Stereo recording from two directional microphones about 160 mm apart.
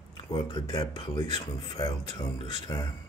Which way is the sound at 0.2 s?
30° left (ahead or behind).